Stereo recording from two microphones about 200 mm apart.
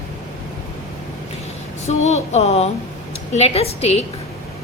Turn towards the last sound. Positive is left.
turn(degrees=30)  # may be behind; listen again after turning